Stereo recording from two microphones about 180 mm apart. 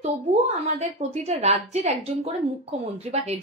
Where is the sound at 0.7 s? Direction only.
40° right (ahead or behind).